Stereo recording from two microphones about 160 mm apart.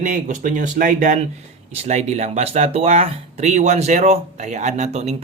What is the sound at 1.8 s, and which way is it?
Speech, 45° right (ahead or behind).